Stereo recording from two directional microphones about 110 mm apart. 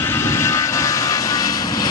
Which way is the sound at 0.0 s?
20° left (ahead or behind).